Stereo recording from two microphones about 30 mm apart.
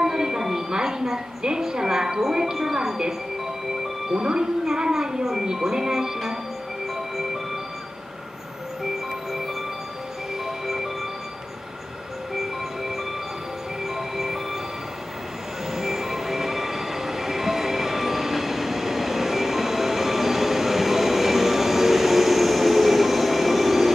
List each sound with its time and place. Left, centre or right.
0.0 s a woman's voice: centre
4.1 s speech: right
12.4 s music: centre
13.8 s train: centre
15.7 s train: centre